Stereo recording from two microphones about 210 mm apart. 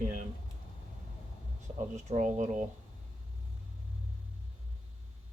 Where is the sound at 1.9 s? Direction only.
35° right (ahead or behind).